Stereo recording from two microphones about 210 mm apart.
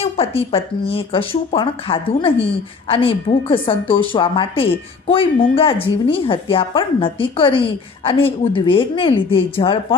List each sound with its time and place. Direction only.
0.0 s speech: 25° left (ahead or behind)